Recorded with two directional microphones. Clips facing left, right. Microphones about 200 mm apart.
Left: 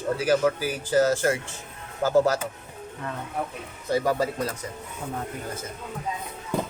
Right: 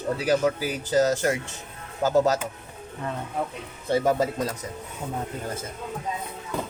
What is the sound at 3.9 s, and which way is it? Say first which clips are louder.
Speech: right 2 dB; 25° right (ahead or behind).